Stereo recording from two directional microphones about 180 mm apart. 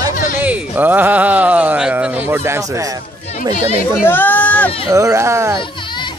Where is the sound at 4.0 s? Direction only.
10° left (ahead or behind).